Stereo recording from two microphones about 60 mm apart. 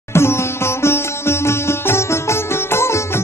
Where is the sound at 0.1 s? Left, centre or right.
Left.